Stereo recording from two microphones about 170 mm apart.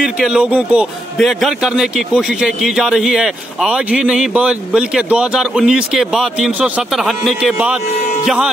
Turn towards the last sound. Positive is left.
turn(degrees=0)  # may be behind; listen again after turning